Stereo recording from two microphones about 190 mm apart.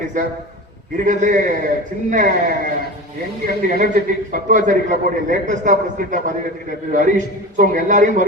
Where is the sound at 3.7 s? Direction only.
45° right (ahead or behind).